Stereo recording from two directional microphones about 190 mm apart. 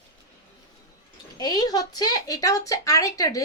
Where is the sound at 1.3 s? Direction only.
20° left (ahead or behind).